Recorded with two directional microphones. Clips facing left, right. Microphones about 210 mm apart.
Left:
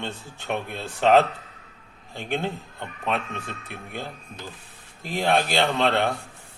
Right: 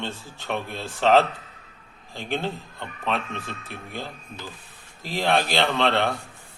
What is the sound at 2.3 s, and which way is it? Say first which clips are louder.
Speech: even; 15° left (ahead or behind).